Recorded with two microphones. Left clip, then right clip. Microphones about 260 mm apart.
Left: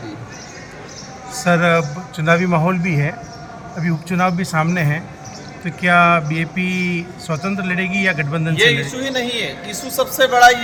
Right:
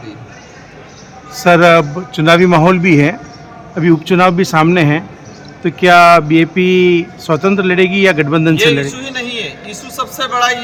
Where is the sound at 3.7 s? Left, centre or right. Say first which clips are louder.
Right 11 dB; right.